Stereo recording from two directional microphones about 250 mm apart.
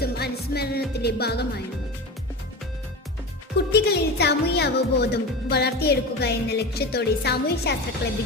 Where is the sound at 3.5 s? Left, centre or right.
Left.